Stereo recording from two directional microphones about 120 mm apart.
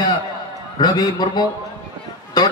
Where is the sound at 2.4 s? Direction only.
35° left (ahead or behind).